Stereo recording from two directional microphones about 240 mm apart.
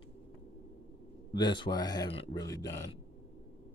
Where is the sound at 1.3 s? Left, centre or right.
Centre.